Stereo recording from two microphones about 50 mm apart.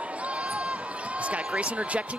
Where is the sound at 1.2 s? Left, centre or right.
Right.